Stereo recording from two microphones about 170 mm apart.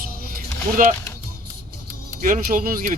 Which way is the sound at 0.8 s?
55° right (ahead or behind).